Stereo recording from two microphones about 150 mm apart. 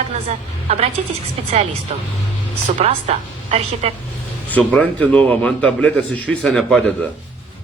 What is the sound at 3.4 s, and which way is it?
Speech, 40° right (ahead or behind).